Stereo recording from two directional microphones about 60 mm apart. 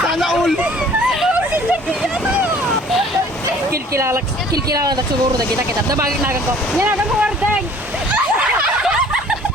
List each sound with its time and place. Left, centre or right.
0.0 s hubbub: centre
3.9 s speech: right
4.5 s speech: right
6.7 s speech: right
8.1 s splash: right